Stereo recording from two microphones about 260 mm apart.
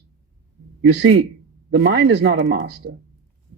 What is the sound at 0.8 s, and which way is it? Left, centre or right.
A man's voice, right.